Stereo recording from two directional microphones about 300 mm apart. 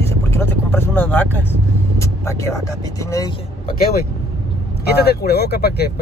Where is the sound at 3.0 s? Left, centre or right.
Centre.